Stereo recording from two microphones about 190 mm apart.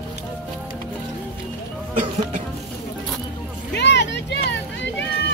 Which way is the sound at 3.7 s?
65° left (ahead or behind).